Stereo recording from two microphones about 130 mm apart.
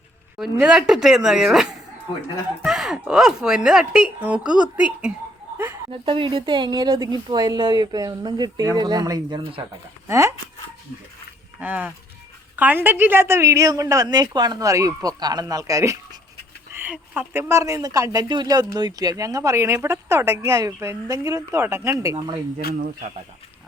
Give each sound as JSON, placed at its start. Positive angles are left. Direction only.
{"t": 0.6, "sound": "speech", "side_deg": -5}
{"t": 5.9, "sound": "a woman's voice", "side_deg": -40}
{"t": 10.1, "sound": "speech", "side_deg": -20}
{"t": 11.6, "sound": "speech", "side_deg": -10}
{"t": 16.7, "sound": "speech", "side_deg": -15}
{"t": 22.0, "sound": "speech", "side_deg": -30}
{"t": 22.5, "sound": "speech", "side_deg": -90}